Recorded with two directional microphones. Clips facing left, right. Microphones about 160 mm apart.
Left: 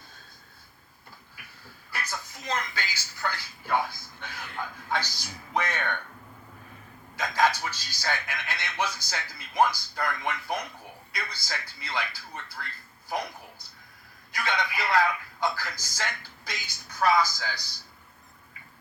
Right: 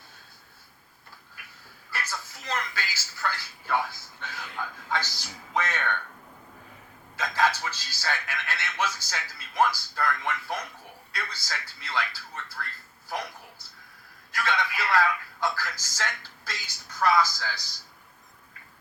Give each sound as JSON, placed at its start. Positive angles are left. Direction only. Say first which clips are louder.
{"t": 1.9, "sound": "television", "louder": "even", "side_deg": 15}
{"t": 4.5, "sound": "music", "louder": "even", "side_deg": 15}
{"t": 7.2, "sound": "a man's voice", "louder": "left 1 dB", "side_deg": 15}
{"t": 13.1, "sound": "a sound", "louder": "left 2 dB", "side_deg": 15}
{"t": 14.3, "sound": "a man's voice", "louder": "right 1 dB", "side_deg": 15}